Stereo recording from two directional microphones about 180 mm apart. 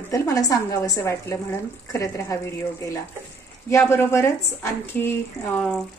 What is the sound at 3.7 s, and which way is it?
A woman's voice, 15° left (ahead or behind).